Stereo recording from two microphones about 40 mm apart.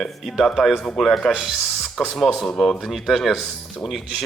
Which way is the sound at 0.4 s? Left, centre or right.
Centre.